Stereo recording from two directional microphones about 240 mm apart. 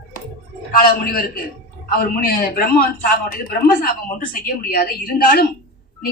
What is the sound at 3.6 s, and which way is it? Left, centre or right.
A man's voice, left.